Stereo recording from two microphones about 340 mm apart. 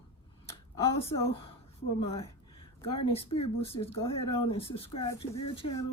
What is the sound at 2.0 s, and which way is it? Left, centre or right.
Speech, centre.